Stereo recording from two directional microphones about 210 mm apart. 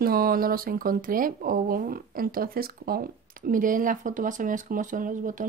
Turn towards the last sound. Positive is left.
turn(degrees=-40)  # may be behind; listen again after turning